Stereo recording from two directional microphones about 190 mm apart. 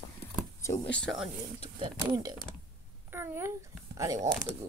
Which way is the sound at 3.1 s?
15° right (ahead or behind).